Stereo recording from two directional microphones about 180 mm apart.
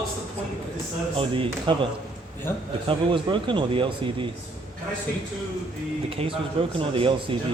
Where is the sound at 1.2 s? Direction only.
30° right (ahead or behind).